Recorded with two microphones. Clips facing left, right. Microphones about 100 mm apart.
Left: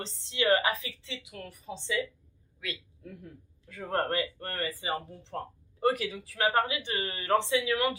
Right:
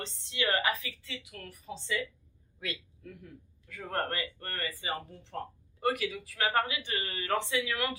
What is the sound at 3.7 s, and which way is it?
Speech, 30° left (ahead or behind).